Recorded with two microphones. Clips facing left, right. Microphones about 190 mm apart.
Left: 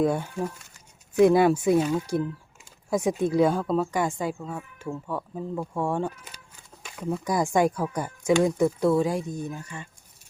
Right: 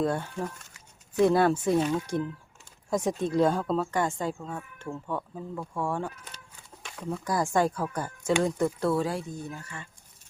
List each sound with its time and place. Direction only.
0.0 s speech: 10° left (ahead or behind)
6.8 s a sound: 5° left (ahead or behind)
7.3 s speech: 15° left (ahead or behind)